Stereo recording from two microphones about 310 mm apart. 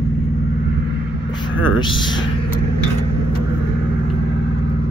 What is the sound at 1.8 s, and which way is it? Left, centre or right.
Speech, centre.